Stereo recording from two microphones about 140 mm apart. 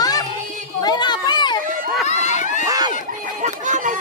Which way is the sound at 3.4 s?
60° right (ahead or behind).